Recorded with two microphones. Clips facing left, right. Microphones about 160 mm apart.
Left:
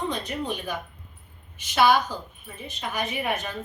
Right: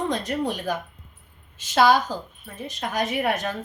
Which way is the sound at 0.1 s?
90° right.